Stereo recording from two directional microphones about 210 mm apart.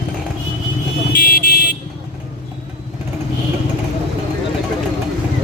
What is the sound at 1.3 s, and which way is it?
Vehicle, 45° left (ahead or behind).